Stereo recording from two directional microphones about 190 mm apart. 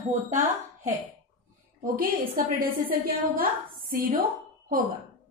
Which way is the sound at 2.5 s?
50° right (ahead or behind).